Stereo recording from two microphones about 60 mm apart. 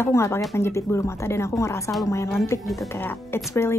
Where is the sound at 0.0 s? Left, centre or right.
Left.